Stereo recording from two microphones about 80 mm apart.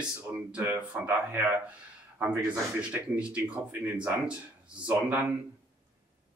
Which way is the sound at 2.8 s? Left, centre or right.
Centre.